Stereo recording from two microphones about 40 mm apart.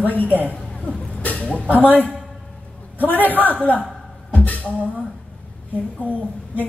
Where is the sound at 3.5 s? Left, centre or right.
Left.